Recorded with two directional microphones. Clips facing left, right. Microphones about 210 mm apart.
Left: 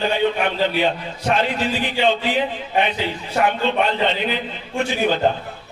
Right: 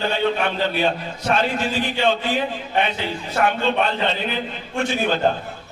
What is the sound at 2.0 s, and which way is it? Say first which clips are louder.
Speech: left 2 dB; 20° left (ahead or behind).